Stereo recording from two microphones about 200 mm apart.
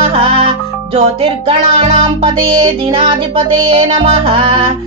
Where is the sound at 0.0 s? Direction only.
30° right (ahead or behind).